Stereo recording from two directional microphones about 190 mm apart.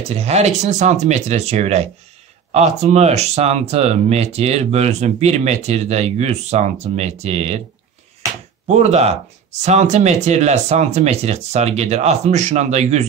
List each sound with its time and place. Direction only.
0.0 s speech: 35° right (ahead or behind)
8.6 s speech: 35° right (ahead or behind)